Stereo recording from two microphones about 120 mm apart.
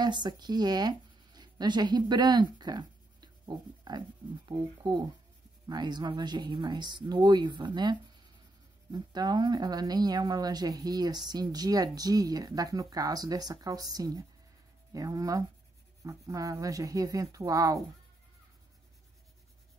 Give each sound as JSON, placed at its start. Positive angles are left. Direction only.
{"t": 0.0, "sound": "speech", "side_deg": -35}